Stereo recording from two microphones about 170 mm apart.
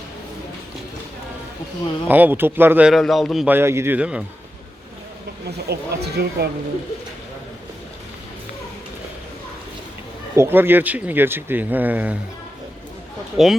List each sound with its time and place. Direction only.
2.0 s speech: 10° right (ahead or behind)
3.5 s speech: 15° right (ahead or behind)
5.5 s speech: 70° right (ahead or behind)
10.3 s speech: 15° right (ahead or behind)
13.3 s speech: centre (ahead or behind)